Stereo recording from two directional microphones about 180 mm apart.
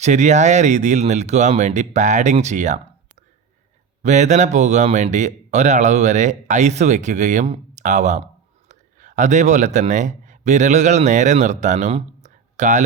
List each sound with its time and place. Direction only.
0.0 s speech: 40° right (ahead or behind)
4.0 s speech: 40° right (ahead or behind)